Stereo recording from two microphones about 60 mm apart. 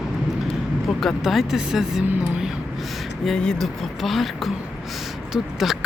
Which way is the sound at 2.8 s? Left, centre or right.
Centre.